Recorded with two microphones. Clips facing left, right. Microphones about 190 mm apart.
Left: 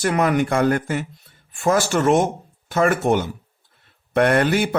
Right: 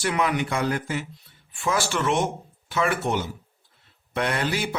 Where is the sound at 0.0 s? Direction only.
50° left (ahead or behind).